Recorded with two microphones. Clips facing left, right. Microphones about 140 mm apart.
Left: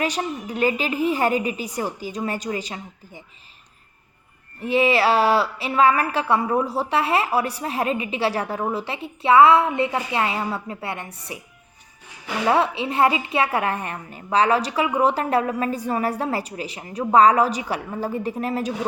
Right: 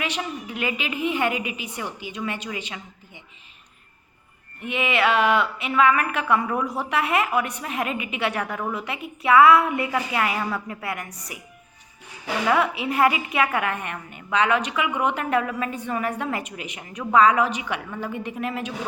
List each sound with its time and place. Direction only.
0.0 s a woman's voice: 40° left (ahead or behind)
4.6 s a woman's voice: 35° left (ahead or behind)
12.5 s a woman's voice: 30° left (ahead or behind)